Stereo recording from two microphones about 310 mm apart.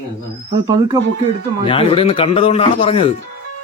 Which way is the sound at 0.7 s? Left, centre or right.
Centre.